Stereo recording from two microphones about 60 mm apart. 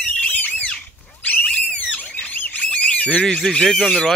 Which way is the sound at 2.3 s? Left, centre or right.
Left.